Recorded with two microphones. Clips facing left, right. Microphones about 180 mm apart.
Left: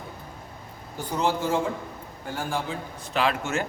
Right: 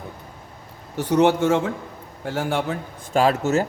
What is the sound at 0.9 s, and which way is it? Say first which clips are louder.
Speech: right 9 dB; 80° right.